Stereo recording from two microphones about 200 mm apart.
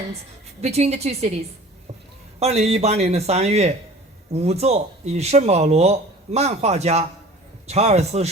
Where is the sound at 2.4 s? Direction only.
30° right (ahead or behind).